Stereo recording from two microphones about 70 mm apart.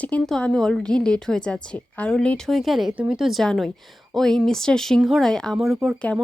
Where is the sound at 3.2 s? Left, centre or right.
Centre.